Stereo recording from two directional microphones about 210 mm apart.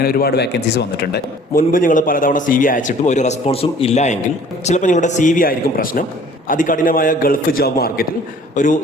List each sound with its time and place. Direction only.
0.0 s a man's voice: 45° left (ahead or behind)